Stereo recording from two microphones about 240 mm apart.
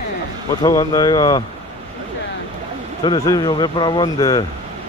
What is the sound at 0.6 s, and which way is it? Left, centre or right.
Speech, centre.